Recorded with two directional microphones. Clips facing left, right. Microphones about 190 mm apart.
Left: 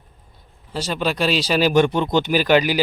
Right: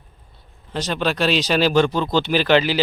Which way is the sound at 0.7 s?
10° left (ahead or behind).